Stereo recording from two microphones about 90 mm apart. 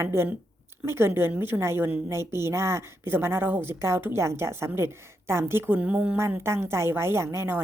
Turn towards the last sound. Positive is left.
turn(degrees=-25)  # may be behind; listen again after turning